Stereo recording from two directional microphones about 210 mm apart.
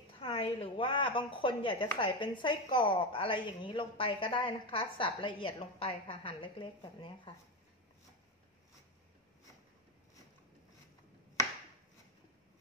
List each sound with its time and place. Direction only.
0.2 s a woman's voice: 25° left (ahead or behind)